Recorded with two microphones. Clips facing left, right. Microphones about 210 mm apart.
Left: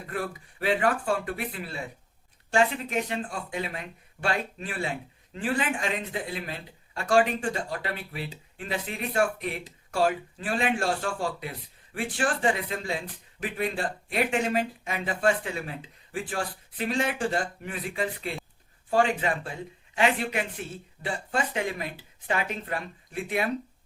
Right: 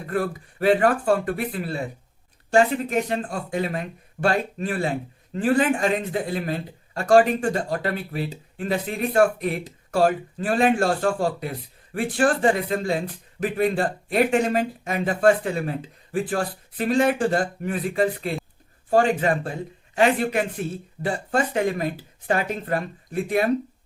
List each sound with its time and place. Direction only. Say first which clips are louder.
0.0 s speech: right 7 dB; 45° right (ahead or behind)